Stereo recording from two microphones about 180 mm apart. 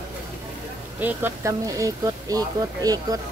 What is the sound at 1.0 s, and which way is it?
Speech, 10° right (ahead or behind).